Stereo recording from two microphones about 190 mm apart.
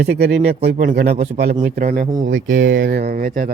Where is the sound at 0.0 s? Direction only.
60° right (ahead or behind).